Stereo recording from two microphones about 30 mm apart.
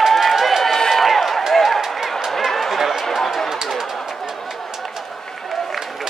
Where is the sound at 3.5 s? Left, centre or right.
Centre.